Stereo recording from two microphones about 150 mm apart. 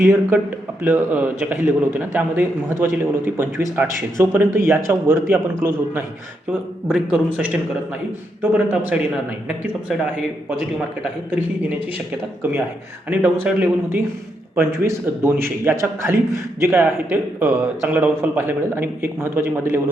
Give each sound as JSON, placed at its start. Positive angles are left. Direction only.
{"t": 0.0, "sound": "a man's voice", "side_deg": -15}
{"t": 12.4, "sound": "a man's voice", "side_deg": -10}